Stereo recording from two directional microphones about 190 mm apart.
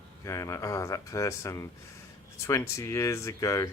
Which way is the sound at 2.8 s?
15° left (ahead or behind).